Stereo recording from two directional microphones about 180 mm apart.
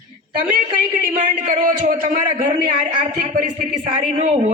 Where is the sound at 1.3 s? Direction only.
45° right (ahead or behind).